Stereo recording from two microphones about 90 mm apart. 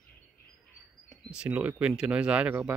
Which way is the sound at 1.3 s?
10° right (ahead or behind).